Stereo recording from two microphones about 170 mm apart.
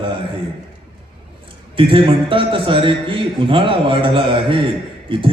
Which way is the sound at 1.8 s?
30° right (ahead or behind).